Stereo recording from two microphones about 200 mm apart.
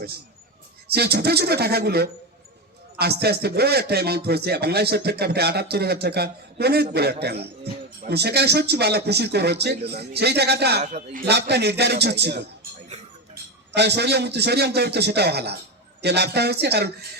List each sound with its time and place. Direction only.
0.9 s a man's voice: 55° right (ahead or behind)
10.8 s a man's voice: 40° right (ahead or behind)
11.3 s a man's voice: 55° right (ahead or behind)